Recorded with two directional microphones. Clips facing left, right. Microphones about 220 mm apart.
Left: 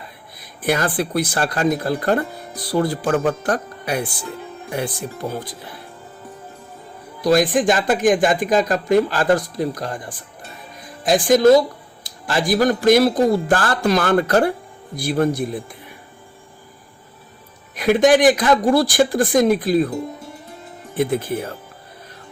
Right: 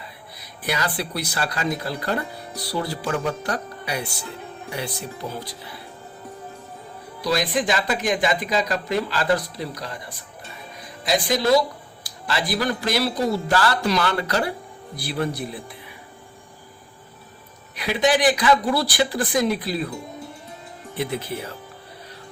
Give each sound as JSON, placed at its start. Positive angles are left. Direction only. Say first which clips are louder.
{"t": 0.3, "sound": "speech", "louder": "left 7 dB", "side_deg": 50}
{"t": 7.2, "sound": "speech", "louder": "left 7 dB", "side_deg": 45}
{"t": 17.7, "sound": "speech", "louder": "left 7 dB", "side_deg": 50}
{"t": 20.9, "sound": "speech", "louder": "left 7 dB", "side_deg": 50}